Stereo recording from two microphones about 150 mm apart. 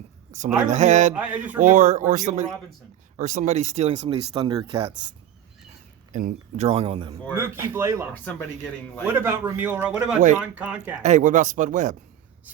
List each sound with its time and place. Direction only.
0.3 s speech: 55° right (ahead or behind)
1.1 s a man's voice: 10° right (ahead or behind)
1.5 s speech: 55° right (ahead or behind)
4.4 s speech: 30° right (ahead or behind)
6.1 s speech: 55° right (ahead or behind)
6.7 s speech: 40° right (ahead or behind)
7.3 s a man's voice: 15° right (ahead or behind)
8.2 s speech: 10° left (ahead or behind)
9.1 s a man's voice: 15° right (ahead or behind)
11.0 s speech: 55° right (ahead or behind)